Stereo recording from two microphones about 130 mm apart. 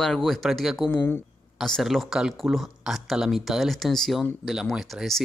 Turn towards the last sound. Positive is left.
turn(degrees=0)  # may be behind; listen again after turning